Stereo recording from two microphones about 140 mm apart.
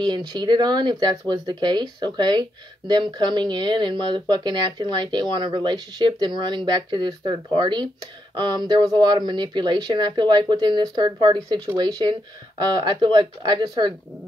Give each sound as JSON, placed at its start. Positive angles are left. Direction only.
{"t": 0.0, "sound": "speech", "side_deg": -30}